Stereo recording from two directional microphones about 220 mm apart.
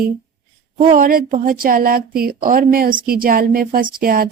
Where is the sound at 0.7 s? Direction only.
35° right (ahead or behind).